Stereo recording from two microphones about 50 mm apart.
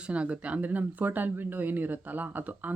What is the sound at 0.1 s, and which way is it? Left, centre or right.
A woman's voice, right.